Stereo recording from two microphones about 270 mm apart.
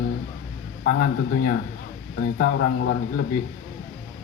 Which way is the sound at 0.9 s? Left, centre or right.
Left.